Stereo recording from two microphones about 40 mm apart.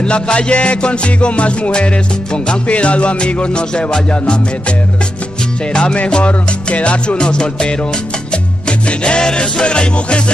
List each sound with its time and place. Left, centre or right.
0.0 s music: left
5.7 s music: left